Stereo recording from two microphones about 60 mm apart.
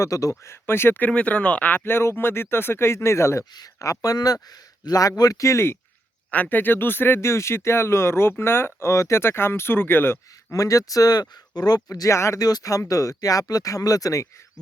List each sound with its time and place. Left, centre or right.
0.0 s speech: left
0.5 s speech: left
1.1 s speech: left
1.8 s speech: left
3.6 s speech: left
6.3 s speech: left
10.5 s speech: left
11.6 s speech: left
12.4 s speech: left